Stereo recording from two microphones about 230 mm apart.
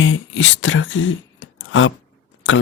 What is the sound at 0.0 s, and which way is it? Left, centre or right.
Beatboxing, left.